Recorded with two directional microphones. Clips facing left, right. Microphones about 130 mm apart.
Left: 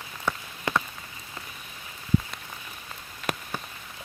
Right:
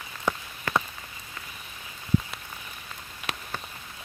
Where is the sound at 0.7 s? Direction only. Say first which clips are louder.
Even; 20° left (ahead or behind).